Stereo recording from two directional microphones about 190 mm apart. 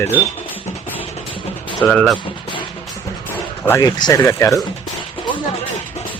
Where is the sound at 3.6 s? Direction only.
15° left (ahead or behind).